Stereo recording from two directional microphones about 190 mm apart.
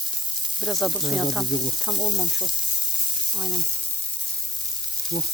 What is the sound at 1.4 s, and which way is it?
Sizzle, 20° left (ahead or behind).